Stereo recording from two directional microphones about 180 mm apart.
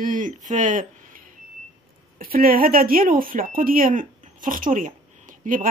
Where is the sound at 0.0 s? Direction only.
50° right (ahead or behind).